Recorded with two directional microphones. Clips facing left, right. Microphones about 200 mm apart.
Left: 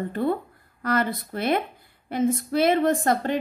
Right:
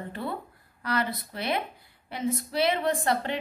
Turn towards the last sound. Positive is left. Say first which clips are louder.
# left 5 dB
turn(degrees=45)  # may be behind; listen again after turning